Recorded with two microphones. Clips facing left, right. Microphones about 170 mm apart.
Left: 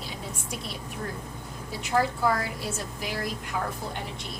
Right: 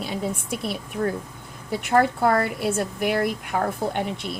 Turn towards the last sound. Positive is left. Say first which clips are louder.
# right 9 dB
turn(degrees=-65)  # may be behind; listen again after turning